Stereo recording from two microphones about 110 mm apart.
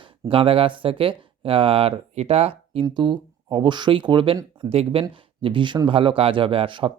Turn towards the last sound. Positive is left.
turn(degrees=-50)  # may be behind; listen again after turning